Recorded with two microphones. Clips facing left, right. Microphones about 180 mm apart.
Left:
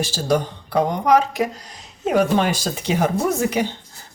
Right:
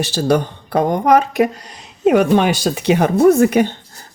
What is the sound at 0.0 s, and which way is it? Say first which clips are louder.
Speech: right 4 dB; 65° right (ahead or behind).